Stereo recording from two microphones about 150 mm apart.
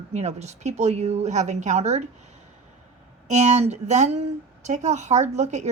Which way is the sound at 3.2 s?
50° right (ahead or behind).